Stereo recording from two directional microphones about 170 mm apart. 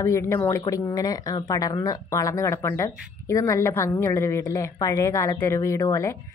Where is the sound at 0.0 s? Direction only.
15° left (ahead or behind).